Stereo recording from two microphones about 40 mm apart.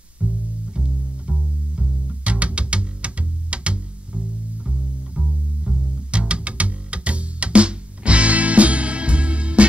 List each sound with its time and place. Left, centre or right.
0.2 s music: right
0.7 s bowed string instrument: right
6.1 s music: right